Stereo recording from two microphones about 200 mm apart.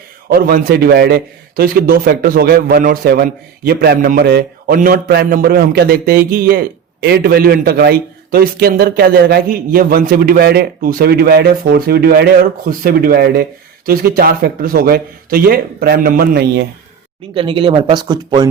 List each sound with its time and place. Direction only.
0.3 s a man's voice: 50° right (ahead or behind)
17.3 s speech: 25° right (ahead or behind)